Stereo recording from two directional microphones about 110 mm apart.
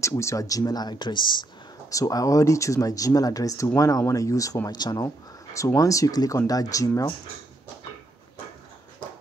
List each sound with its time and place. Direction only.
0.0 s speech: 25° left (ahead or behind); by 1.5 s 45° left (ahead or behind)
1.9 s speech: 30° left (ahead or behind)